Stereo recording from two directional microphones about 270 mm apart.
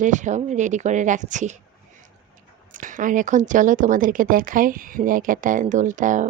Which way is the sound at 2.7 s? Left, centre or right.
Right.